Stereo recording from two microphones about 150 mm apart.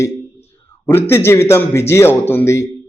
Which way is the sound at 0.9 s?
15° left (ahead or behind).